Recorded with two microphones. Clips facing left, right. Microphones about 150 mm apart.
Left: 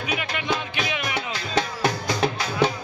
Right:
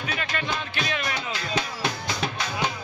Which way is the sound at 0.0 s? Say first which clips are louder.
Left 2 dB; 15° left (ahead or behind).